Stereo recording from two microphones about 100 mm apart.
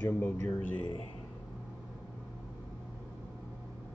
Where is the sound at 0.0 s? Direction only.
20° left (ahead or behind).